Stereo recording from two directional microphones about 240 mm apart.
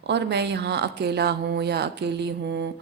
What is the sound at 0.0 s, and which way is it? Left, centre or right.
Speech, right.